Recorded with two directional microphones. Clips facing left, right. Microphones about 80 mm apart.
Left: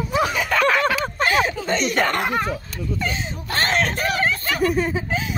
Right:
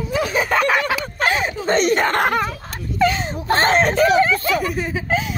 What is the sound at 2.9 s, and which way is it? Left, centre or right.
Speech, right.